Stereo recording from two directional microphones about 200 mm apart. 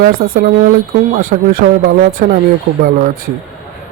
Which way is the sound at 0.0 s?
45° right (ahead or behind).